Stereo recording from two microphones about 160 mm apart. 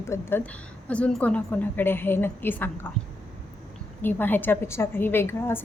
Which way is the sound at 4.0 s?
10° left (ahead or behind).